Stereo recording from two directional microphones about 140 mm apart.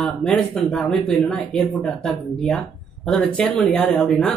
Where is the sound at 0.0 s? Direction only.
5° left (ahead or behind).